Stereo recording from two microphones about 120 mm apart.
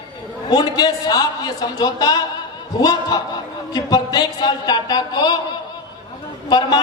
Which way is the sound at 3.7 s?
35° left (ahead or behind).